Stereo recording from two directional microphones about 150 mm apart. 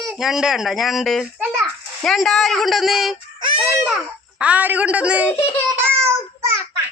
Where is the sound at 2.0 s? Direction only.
Centre (ahead or behind).